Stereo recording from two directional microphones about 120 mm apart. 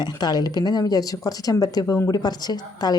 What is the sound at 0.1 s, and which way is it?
Speech, 35° left (ahead or behind).